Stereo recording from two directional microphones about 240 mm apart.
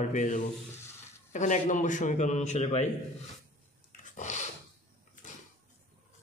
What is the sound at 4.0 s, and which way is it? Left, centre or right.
Dog, left.